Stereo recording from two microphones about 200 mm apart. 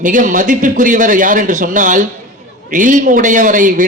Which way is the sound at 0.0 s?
40° right (ahead or behind).